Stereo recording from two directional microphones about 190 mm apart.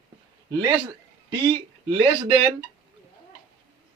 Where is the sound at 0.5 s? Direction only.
20° right (ahead or behind).